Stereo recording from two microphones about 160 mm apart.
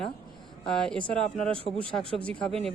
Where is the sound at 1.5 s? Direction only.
35° right (ahead or behind).